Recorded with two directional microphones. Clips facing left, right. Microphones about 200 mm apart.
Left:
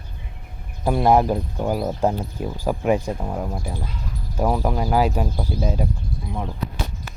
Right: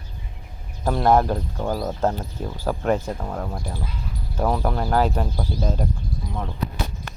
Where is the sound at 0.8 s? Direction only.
10° left (ahead or behind).